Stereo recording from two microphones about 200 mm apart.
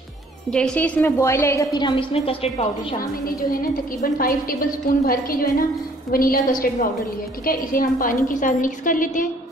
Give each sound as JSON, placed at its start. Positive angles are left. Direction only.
{"t": 0.5, "sound": "a woman's voice", "side_deg": 5}
{"t": 3.0, "sound": "a woman's voice", "side_deg": 45}
{"t": 7.4, "sound": "a woman's voice", "side_deg": 45}